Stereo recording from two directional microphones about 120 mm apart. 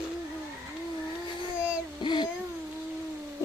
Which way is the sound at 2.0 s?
40° left (ahead or behind).